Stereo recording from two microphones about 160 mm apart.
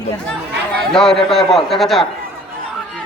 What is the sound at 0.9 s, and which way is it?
Speech, 5° left (ahead or behind).